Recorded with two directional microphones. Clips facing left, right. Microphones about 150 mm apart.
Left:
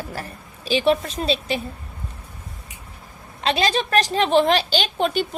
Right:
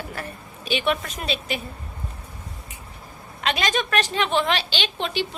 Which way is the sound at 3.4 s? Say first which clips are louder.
Left 3 dB; 35° left (ahead or behind).